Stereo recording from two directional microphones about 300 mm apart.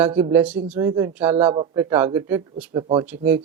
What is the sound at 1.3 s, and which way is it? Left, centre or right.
Speech, centre.